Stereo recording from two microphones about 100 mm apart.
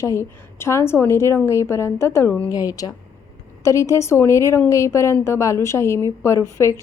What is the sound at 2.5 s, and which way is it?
A woman's voice, 35° left (ahead or behind).